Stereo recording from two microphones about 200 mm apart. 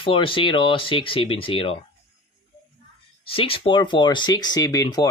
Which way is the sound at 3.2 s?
25° left (ahead or behind).